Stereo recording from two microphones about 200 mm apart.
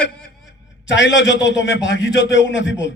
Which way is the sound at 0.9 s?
65° left (ahead or behind).